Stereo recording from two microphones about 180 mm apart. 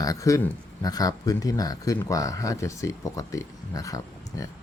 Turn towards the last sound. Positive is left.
turn(degrees=20)  # may be behind; listen again after turning